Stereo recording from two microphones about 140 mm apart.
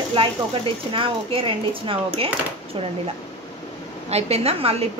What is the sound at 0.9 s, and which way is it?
Speech, 40° right (ahead or behind).